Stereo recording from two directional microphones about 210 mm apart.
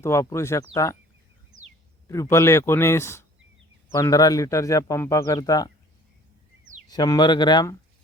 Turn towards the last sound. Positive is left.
turn(degrees=20)  # may be behind; listen again after turning